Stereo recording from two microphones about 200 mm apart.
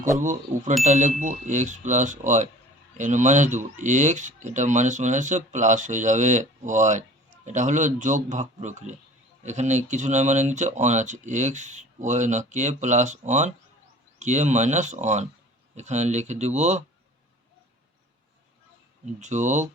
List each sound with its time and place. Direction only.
0.2 s speech: 40° right (ahead or behind)
19.2 s speech: 35° right (ahead or behind)